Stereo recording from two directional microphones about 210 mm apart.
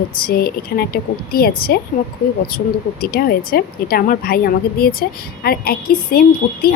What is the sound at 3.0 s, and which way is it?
A woman's voice, 45° left (ahead or behind).